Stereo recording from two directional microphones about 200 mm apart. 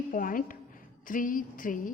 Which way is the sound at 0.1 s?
45° left (ahead or behind).